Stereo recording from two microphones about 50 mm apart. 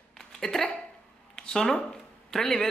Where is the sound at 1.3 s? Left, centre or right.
Centre.